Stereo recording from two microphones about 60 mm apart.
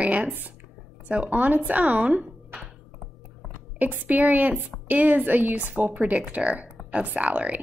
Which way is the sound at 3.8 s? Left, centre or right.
Right.